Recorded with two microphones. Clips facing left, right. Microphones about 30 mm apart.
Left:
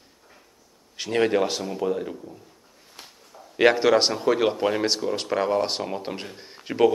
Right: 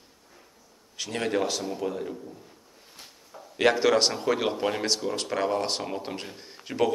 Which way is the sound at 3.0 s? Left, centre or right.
Left.